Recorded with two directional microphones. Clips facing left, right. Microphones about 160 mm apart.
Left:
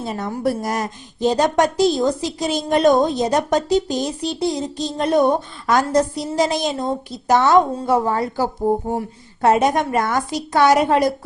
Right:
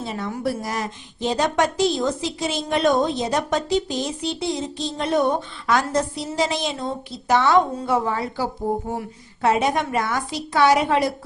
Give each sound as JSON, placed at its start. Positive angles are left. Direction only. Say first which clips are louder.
{"t": 0.0, "sound": "a woman's voice", "louder": "left 4 dB", "side_deg": 45}